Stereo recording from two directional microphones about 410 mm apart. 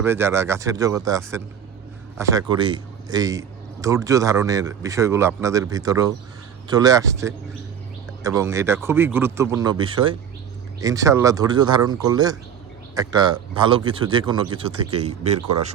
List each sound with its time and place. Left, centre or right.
0.0 s a man's voice: centre
15.4 s a man's voice: right